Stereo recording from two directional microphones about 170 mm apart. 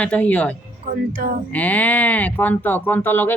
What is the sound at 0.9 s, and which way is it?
Speech, 55° right (ahead or behind).